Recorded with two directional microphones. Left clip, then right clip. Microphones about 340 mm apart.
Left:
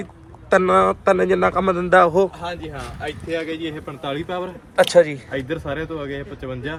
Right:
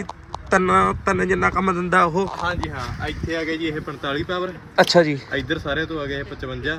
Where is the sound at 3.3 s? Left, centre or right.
Centre.